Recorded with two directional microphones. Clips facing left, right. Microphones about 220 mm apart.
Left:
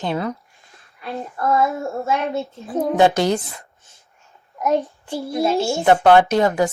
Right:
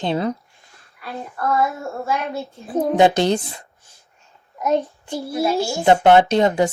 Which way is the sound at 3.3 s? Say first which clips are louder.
Right 1 dB; 30° right (ahead or behind).